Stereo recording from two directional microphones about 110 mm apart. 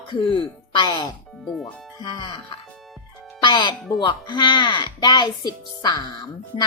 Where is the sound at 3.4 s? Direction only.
45° left (ahead or behind).